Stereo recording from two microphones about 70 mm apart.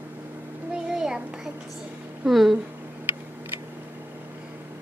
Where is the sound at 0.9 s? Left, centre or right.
Centre.